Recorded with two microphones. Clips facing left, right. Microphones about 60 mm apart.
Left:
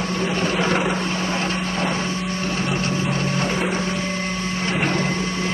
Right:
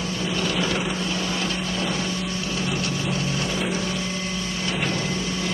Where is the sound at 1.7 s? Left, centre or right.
Left.